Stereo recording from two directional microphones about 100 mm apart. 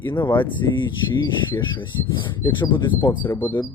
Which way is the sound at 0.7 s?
50° left (ahead or behind).